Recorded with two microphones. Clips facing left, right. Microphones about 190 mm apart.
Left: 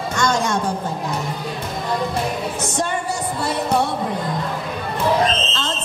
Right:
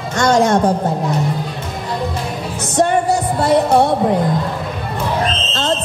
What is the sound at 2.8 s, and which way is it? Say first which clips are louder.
Music: right 11 dB; 60° right (ahead or behind).